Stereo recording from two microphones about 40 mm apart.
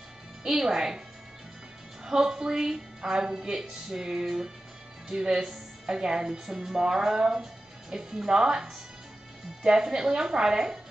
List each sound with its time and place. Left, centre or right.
0.4 s a woman's voice: centre
2.0 s a woman's voice: centre